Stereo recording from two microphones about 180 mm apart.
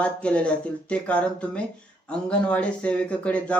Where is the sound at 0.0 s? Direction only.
5° left (ahead or behind).